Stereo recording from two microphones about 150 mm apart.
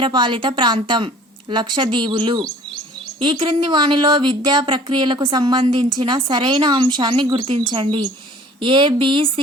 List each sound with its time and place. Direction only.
0.0 s speech: 30° right (ahead or behind)